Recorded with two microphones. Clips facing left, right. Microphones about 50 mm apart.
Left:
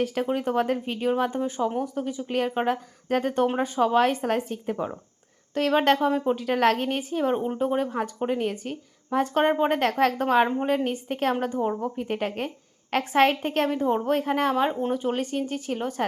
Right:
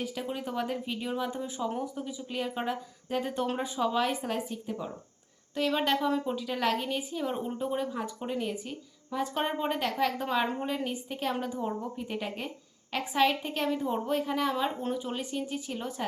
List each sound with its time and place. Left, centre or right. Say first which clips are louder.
0.0 s a woman's voice: left 9 dB; left
1.8 s a woman's voice: left 7 dB; left
6.1 s speech: left 6 dB; left
6.3 s a woman's voice: left 7 dB; left
7.3 s speech: left 7 dB; left
7.6 s a woman's voice: left 7 dB; left